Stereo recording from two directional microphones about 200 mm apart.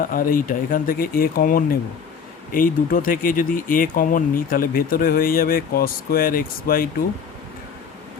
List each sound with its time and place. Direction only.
0.0 s speech: 45° left (ahead or behind)